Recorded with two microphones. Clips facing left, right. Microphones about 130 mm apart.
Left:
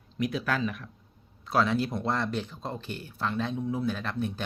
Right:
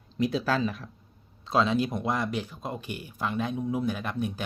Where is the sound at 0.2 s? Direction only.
30° right (ahead or behind).